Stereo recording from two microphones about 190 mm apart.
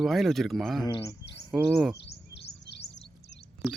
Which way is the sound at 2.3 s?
65° left (ahead or behind).